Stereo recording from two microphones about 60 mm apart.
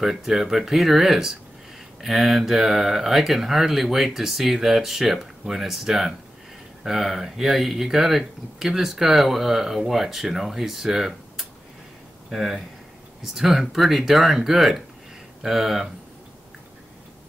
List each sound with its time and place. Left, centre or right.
0.0 s speech: centre